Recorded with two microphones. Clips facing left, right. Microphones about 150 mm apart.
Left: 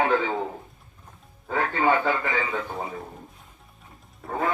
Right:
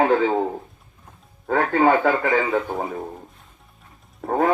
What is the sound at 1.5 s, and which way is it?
Speech, 55° right (ahead or behind).